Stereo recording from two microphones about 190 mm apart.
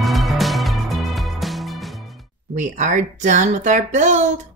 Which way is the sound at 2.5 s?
40° right (ahead or behind).